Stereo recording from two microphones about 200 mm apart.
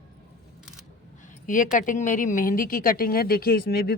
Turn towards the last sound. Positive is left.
turn(degrees=50)  # may be behind; listen again after turning